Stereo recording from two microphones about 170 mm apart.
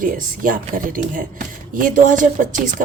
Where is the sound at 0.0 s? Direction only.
55° right (ahead or behind).